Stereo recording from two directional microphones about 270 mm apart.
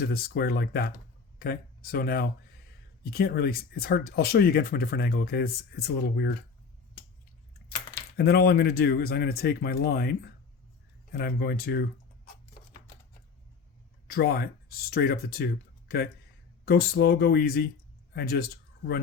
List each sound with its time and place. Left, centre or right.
0.0 s speech: left
8.1 s speech: left
14.1 s speech: left
16.6 s speech: left